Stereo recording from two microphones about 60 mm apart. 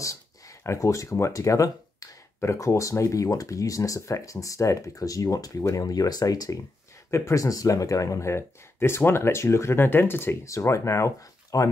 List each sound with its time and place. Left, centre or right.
0.0 s a sound: left
2.4 s speech: left
7.1 s speech: left
10.4 s speech: left